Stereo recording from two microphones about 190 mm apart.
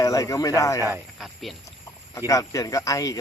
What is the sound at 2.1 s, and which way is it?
Speech, 15° left (ahead or behind).